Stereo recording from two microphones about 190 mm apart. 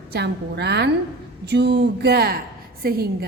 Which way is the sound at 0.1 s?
60° right (ahead or behind).